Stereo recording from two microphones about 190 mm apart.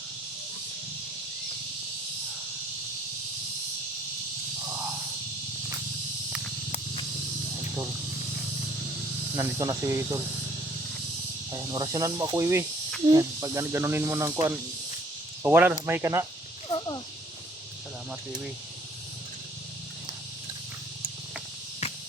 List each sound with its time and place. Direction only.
9.3 s speech: 15° right (ahead or behind)
11.5 s speech: 20° right (ahead or behind)
16.6 s snake: 25° left (ahead or behind)